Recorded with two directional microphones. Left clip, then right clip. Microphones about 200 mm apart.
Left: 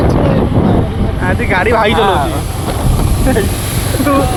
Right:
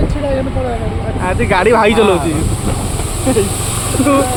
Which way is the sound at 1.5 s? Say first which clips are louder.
Right 1 dB; 30° right (ahead or behind).